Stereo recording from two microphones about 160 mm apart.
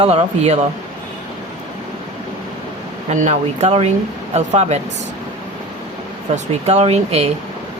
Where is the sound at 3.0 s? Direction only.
45° right (ahead or behind).